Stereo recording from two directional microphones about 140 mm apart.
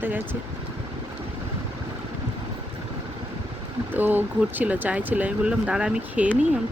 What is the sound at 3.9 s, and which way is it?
Speech, 15° right (ahead or behind).